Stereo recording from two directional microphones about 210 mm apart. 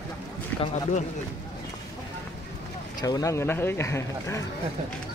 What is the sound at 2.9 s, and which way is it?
Speech, 15° left (ahead or behind).